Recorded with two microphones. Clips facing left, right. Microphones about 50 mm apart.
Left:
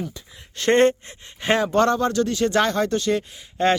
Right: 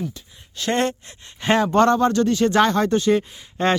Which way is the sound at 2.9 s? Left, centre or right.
Centre.